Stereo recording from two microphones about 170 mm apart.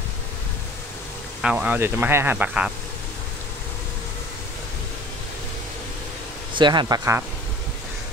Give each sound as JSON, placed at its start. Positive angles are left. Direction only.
{"t": 1.4, "sound": "speech", "side_deg": -10}
{"t": 6.5, "sound": "speech", "side_deg": -25}